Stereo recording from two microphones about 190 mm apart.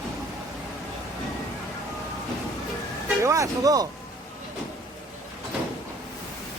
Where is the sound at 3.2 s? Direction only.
15° right (ahead or behind).